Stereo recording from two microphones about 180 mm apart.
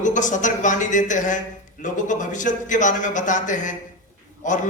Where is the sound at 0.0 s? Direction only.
45° left (ahead or behind).